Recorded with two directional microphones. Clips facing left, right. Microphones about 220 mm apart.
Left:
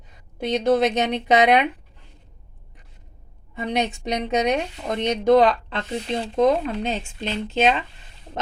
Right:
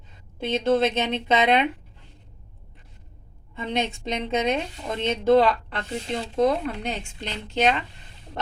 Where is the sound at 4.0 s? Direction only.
15° left (ahead or behind).